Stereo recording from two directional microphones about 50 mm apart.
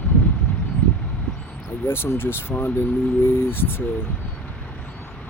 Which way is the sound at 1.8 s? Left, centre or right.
Left.